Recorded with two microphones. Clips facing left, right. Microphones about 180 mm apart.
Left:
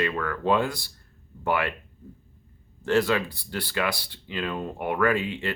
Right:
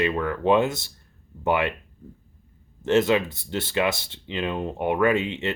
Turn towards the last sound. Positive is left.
turn(degrees=-20)  # may be behind; listen again after turning